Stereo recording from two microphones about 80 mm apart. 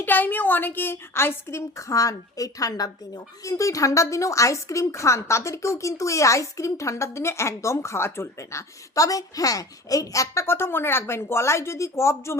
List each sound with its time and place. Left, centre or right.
0.0 s a woman's voice: left